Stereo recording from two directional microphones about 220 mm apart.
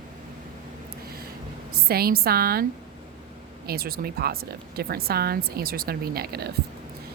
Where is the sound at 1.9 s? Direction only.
45° right (ahead or behind).